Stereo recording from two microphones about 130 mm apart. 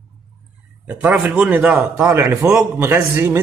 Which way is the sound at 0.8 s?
10° right (ahead or behind).